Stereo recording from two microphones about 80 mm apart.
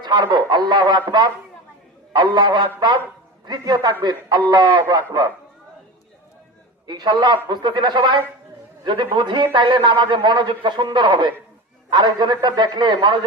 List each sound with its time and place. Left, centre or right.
0.0 s speech: right
2.1 s speech: right
6.8 s a man's voice: right